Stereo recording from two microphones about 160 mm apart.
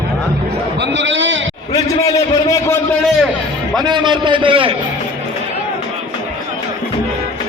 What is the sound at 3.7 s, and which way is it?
A man's voice, 25° right (ahead or behind).